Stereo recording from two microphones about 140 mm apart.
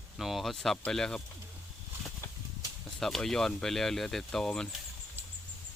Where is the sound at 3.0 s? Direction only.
Centre (ahead or behind).